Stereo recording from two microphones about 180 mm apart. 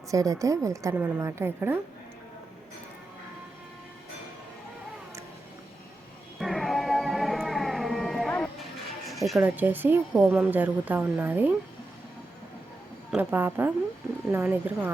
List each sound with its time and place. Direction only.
0.1 s speech: 20° right (ahead or behind)
6.4 s music: centre (ahead or behind)
9.4 s speech: 10° right (ahead or behind)
13.1 s speech: 10° right (ahead or behind)